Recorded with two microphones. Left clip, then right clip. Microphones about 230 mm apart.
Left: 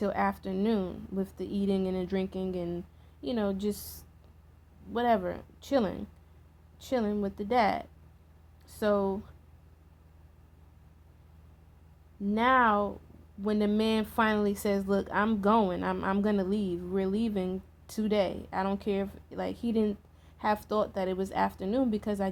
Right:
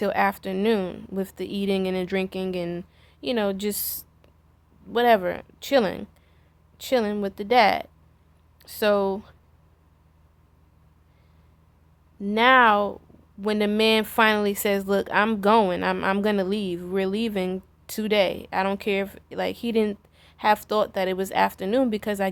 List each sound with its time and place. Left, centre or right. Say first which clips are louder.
0.0 s a woman's voice: right 7 dB; right
12.2 s a woman's voice: right 8 dB; right